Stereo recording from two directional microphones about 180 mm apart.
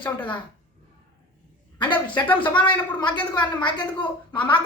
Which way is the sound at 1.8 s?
25° left (ahead or behind).